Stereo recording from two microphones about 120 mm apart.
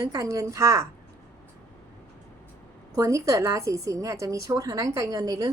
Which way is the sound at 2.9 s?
25° right (ahead or behind).